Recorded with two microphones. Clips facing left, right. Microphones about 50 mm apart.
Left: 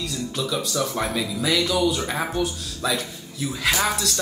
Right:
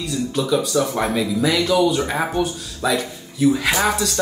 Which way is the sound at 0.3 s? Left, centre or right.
Right.